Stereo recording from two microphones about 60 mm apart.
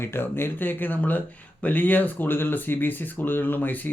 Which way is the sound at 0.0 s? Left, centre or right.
Left.